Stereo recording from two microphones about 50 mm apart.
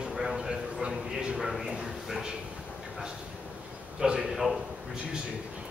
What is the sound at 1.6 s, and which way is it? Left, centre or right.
Speech, centre.